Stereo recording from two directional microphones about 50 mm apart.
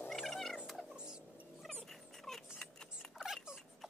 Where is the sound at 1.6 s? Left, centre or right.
Centre.